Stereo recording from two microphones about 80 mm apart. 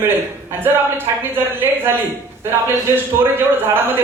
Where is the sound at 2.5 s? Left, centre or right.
Right.